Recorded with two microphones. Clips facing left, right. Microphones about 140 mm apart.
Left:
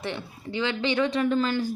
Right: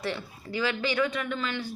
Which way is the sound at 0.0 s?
20° left (ahead or behind).